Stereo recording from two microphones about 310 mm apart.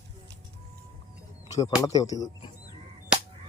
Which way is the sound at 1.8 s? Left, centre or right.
Centre.